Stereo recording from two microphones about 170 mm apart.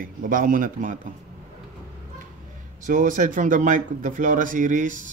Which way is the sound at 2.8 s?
50° right (ahead or behind).